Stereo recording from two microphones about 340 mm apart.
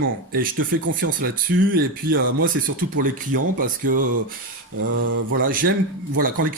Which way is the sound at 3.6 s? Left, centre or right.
Right.